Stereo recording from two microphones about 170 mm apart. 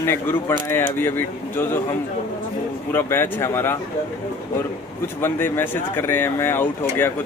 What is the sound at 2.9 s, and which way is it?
Speech, 15° left (ahead or behind).